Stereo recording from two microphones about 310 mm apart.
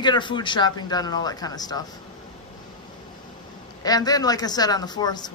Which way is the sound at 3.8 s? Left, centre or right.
Centre.